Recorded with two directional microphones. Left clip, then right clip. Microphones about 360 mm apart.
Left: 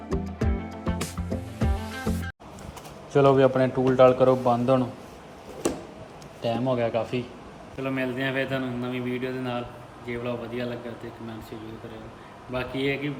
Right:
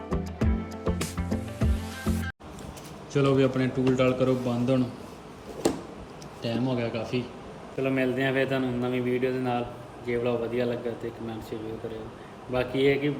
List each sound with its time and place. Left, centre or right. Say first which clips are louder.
0.1 s music: left 2 dB; centre
3.2 s a man's voice: left 5 dB; centre
6.4 s a man's voice: left 4 dB; centre
12.5 s a man's voice: right 4 dB; centre